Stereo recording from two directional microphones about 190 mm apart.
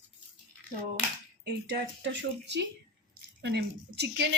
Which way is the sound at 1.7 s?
70° right (ahead or behind).